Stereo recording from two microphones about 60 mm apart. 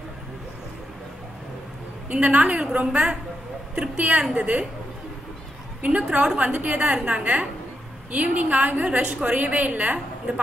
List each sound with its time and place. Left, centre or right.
2.1 s a woman's voice: centre
5.8 s a woman's voice: right